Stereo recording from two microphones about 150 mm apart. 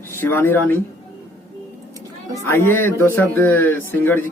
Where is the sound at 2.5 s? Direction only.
15° left (ahead or behind).